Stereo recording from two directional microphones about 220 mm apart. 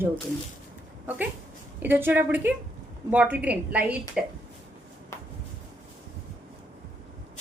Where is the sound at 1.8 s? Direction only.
10° right (ahead or behind).